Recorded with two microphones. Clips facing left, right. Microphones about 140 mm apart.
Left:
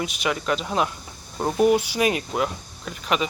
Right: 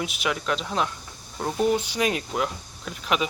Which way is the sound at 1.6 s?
10° left (ahead or behind).